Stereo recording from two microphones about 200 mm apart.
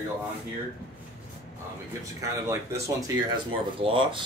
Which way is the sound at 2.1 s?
15° right (ahead or behind).